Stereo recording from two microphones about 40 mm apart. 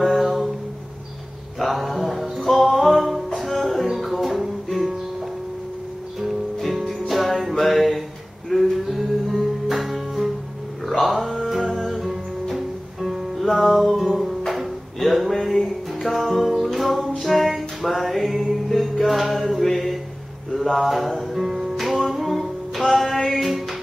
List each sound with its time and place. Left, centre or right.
0.0 s a sound: centre
1.6 s mantra: centre
2.3 s music: centre
6.2 s music: centre